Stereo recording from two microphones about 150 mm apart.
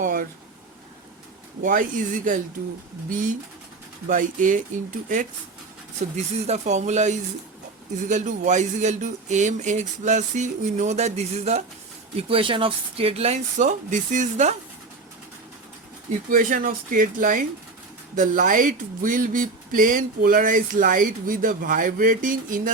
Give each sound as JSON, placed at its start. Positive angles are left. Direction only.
{"t": 0.0, "sound": "a sound", "side_deg": -65}
{"t": 1.6, "sound": "speech", "side_deg": -65}
{"t": 6.1, "sound": "speech", "side_deg": -45}
{"t": 12.3, "sound": "speech", "side_deg": -35}
{"t": 16.3, "sound": "speech", "side_deg": -65}